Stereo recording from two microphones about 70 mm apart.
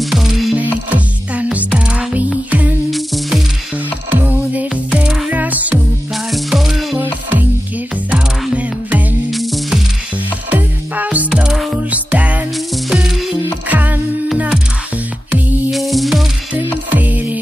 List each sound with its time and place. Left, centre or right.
0.0 s music: centre
0.6 s music: right
2.9 s music: centre
4.2 s music: right
6.3 s music: centre
7.0 s music: right
9.3 s music: centre
10.5 s music: right
11.5 s music: centre
11.9 s music: right
12.9 s music: centre
13.7 s music: right
15.7 s music: centre
16.9 s music: right